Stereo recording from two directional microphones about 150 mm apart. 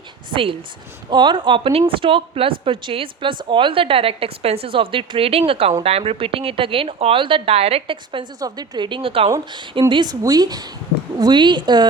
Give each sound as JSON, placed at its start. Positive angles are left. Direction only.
{"t": 0.3, "sound": "a woman's voice", "side_deg": -35}